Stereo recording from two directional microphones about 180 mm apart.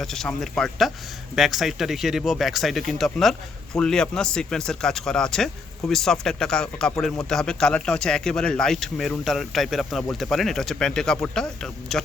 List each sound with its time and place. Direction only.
0.0 s speech: centre (ahead or behind)